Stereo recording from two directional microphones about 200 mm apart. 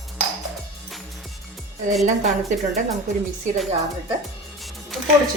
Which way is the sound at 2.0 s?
35° right (ahead or behind).